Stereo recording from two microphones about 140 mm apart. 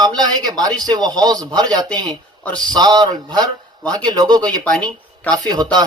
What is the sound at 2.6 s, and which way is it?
Speech, 30° right (ahead or behind).